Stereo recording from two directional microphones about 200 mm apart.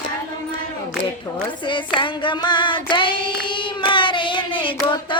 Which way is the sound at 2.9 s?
25° left (ahead or behind).